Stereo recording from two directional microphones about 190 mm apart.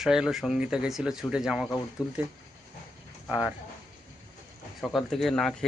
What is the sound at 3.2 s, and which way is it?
Speech, 5° right (ahead or behind).